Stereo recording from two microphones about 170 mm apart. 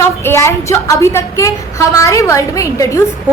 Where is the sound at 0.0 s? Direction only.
15° left (ahead or behind).